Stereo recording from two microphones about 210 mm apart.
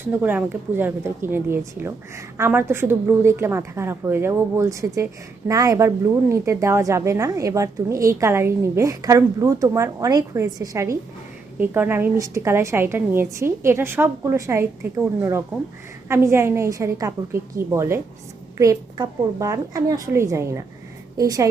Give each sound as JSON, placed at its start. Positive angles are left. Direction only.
{"t": 0.1, "sound": "a woman's voice", "side_deg": -5}